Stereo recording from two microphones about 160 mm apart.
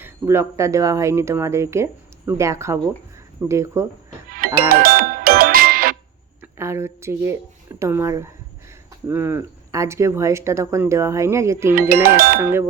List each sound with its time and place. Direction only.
0.0 s speech: 15° right (ahead or behind)
4.3 s music: 60° right (ahead or behind)
6.4 s speech: 15° right (ahead or behind)
11.7 s speech: 65° right (ahead or behind)
12.4 s speech: 15° right (ahead or behind)